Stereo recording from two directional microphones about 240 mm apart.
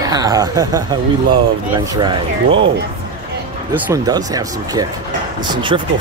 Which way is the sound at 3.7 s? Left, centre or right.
Centre.